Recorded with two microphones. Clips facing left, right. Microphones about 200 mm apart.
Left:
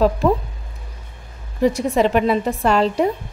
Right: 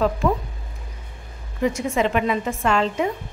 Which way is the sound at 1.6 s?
35° left (ahead or behind).